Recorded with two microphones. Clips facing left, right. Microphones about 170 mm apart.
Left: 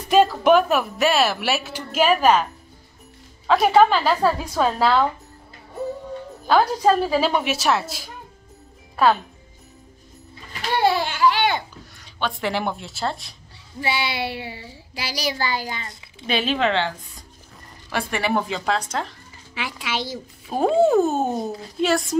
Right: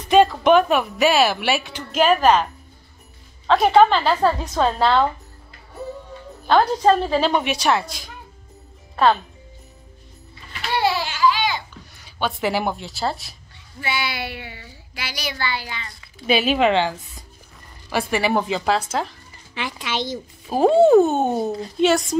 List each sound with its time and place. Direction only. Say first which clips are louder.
0.1 s speech: right 1 dB; 5° left (ahead or behind)
3.4 s speech: right 1 dB; 5° left (ahead or behind)
6.4 s speech: right 1 dB; 5° left (ahead or behind)
10.8 s a sound: left 1 dB; 50° left (ahead or behind)
12.0 s speech: right 2 dB; 5° right (ahead or behind)
13.7 s a child's voice: left 2 dB; 30° left (ahead or behind)
15.9 s a sound: even; 20° left (ahead or behind)
16.3 s speech: right 4 dB; 10° right (ahead or behind)